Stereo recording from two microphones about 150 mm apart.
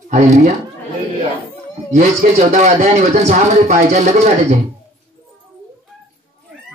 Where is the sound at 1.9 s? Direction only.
50° right (ahead or behind).